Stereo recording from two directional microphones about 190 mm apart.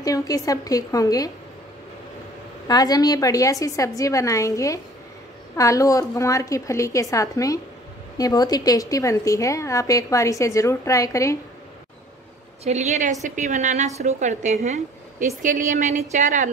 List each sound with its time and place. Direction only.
0.0 s a woman's voice: 20° left (ahead or behind)
2.7 s a woman's voice: 20° left (ahead or behind)
12.6 s a woman's voice: 35° right (ahead or behind)